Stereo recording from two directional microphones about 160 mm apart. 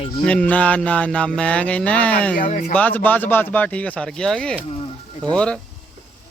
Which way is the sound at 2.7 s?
10° left (ahead or behind).